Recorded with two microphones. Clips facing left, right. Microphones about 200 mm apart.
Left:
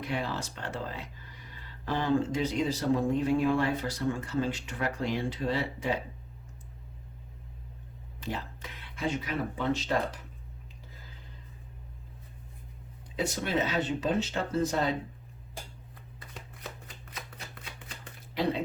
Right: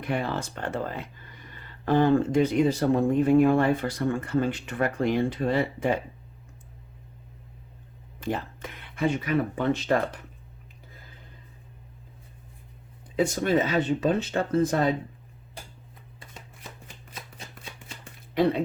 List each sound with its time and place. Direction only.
0.0 s speech: 55° right (ahead or behind)
8.2 s speech: 50° right (ahead or behind)
13.1 s speech: 50° right (ahead or behind)